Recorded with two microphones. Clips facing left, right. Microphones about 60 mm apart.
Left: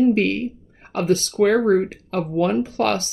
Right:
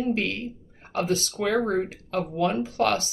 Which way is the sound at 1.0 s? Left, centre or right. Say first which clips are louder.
Left 10 dB; left.